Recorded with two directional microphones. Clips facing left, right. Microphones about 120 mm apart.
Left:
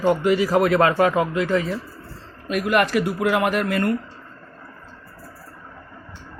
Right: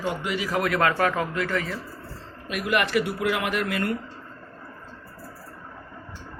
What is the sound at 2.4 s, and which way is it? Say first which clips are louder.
Speech: left 5 dB; 45° left (ahead or behind).